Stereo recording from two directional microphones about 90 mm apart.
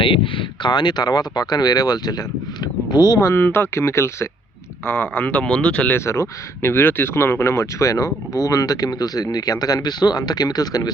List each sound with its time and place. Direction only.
0.0 s speech: 70° left (ahead or behind); by 3.2 s 50° left (ahead or behind)
3.2 s speech: 35° left (ahead or behind); by 6.0 s 15° left (ahead or behind)
6.1 s speech: 30° left (ahead or behind); by 10.9 s 45° left (ahead or behind)